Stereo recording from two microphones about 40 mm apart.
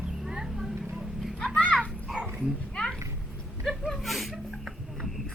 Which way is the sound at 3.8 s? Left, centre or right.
Centre.